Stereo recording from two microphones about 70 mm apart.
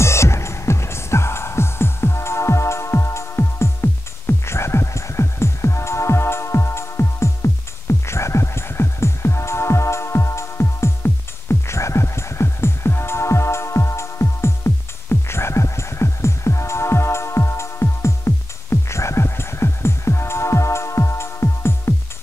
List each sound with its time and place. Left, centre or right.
0.0 s music: left